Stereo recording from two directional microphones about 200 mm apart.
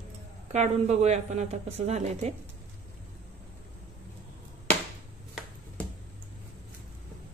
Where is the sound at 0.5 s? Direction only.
35° right (ahead or behind).